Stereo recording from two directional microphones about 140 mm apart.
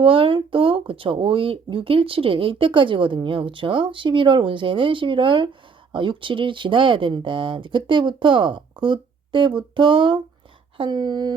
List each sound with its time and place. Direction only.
0.0 s speech: 40° right (ahead or behind)